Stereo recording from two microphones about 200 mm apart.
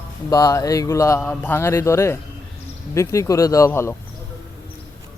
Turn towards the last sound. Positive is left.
turn(degrees=15)  # may be behind; listen again after turning